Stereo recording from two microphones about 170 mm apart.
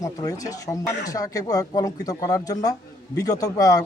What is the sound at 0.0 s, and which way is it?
Speech, 20° left (ahead or behind).